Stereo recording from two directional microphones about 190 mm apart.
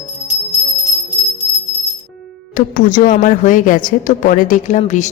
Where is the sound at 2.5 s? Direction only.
45° left (ahead or behind).